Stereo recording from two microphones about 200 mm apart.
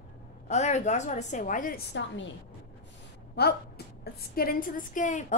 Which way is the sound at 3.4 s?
55° left (ahead or behind).